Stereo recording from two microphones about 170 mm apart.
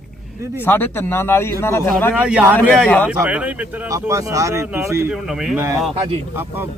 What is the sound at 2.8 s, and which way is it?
Speech, 10° left (ahead or behind).